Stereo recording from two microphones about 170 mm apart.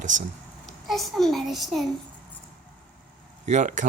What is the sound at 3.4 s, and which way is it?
Speech, 45° right (ahead or behind).